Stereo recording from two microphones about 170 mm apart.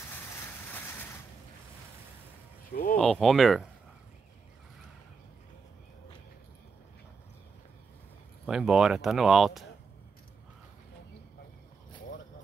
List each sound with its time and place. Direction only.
0.7 s a sound: 10° left (ahead or behind)
2.7 s speech: 55° left (ahead or behind)
3.0 s speech: centre (ahead or behind)
8.5 s speech: 5° right (ahead or behind)